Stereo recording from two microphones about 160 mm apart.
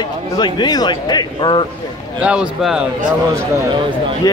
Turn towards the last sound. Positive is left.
turn(degrees=20)  # may be behind; listen again after turning